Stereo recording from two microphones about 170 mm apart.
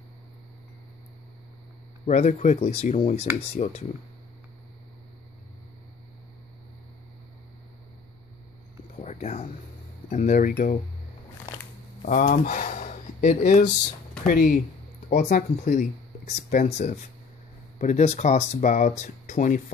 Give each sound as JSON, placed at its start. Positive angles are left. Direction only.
{"t": 2.0, "sound": "speech", "side_deg": 45}
{"t": 9.0, "sound": "a sound", "side_deg": 40}
{"t": 10.0, "sound": "speech", "side_deg": 50}
{"t": 12.0, "sound": "speech", "side_deg": 50}